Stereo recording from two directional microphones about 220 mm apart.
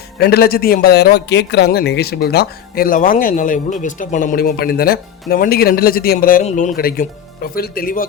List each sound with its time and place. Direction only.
0.2 s speech: 45° left (ahead or behind)